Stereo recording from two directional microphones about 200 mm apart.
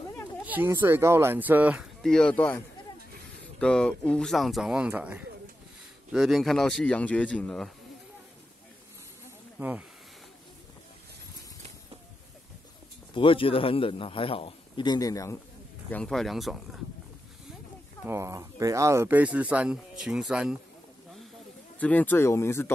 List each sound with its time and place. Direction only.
0.4 s speech: 10° right (ahead or behind)
9.6 s speech: 10° right (ahead or behind)
13.1 s a man's voice: 25° left (ahead or behind)
15.9 s speech: 5° left (ahead or behind)
18.0 s speech: 15° right (ahead or behind)
21.7 s speech: 10° left (ahead or behind)